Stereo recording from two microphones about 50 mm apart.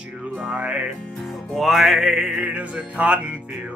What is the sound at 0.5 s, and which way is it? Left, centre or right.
Music, right.